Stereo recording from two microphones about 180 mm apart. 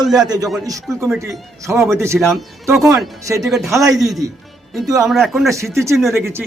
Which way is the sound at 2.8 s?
Centre (ahead or behind).